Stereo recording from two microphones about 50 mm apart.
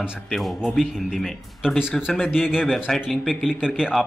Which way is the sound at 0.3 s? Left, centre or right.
Centre.